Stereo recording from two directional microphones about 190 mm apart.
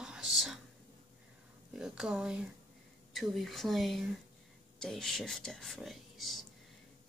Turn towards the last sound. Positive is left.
turn(degrees=0)  # may be behind; listen again after turning